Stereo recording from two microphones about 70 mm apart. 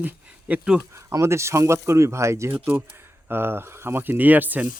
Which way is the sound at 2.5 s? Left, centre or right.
Right.